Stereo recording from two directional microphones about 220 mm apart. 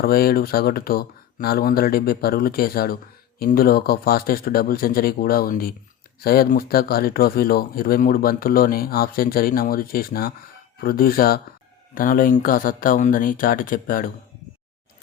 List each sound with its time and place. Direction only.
0.0 s speech: 45° left (ahead or behind)